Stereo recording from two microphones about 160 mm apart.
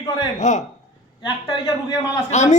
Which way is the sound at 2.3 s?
45° left (ahead or behind).